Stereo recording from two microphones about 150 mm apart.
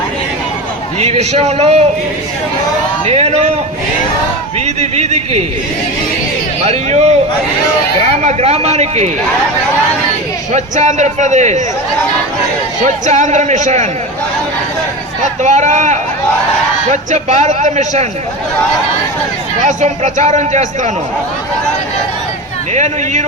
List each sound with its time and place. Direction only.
0.9 s a man's voice: 45° right (ahead or behind)
3.1 s a man's voice: 45° right (ahead or behind)
4.6 s a man's voice: 45° right (ahead or behind)
6.7 s a man's voice: 45° right (ahead or behind)
8.2 s a man's voice: 45° right (ahead or behind)
10.5 s a man's voice: 50° right (ahead or behind)
13.1 s a man's voice: 50° right (ahead or behind)
15.2 s a man's voice: 50° right (ahead or behind)
19.6 s a man's voice: 50° right (ahead or behind)
22.7 s a man's voice: 50° right (ahead or behind)